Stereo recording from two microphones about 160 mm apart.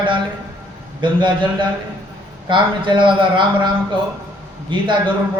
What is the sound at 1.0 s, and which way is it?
Speech, 30° right (ahead or behind).